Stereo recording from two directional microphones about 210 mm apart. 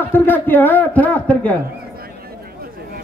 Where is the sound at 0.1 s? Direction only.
10° left (ahead or behind).